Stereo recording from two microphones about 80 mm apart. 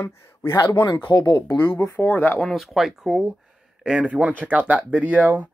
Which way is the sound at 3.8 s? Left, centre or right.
Centre.